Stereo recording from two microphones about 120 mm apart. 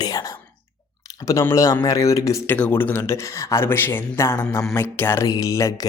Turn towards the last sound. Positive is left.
turn(degrees=25)  # may be behind; listen again after turning